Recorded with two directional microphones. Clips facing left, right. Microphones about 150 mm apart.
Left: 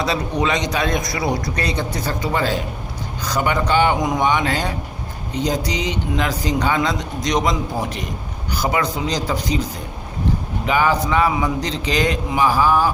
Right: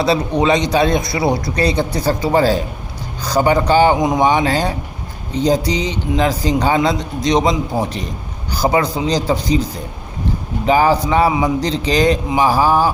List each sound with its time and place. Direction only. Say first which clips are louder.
0.0 s speech: right 5 dB; 30° right (ahead or behind)
10.7 s speech: right 5 dB; 35° right (ahead or behind)